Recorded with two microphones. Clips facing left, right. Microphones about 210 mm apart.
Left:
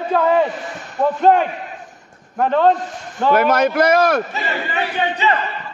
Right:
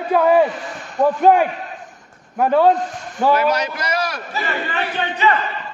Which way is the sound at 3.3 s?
55° left (ahead or behind).